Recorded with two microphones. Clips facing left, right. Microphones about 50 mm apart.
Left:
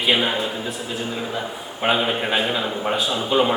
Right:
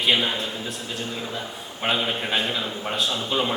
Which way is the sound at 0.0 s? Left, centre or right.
Centre.